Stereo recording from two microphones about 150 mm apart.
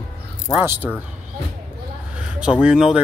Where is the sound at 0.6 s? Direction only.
10° right (ahead or behind).